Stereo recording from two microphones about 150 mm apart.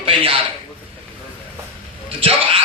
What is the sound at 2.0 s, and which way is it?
Speech, 40° right (ahead or behind).